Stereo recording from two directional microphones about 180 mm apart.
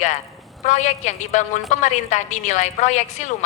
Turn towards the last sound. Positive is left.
turn(degrees=40)  # may be behind; listen again after turning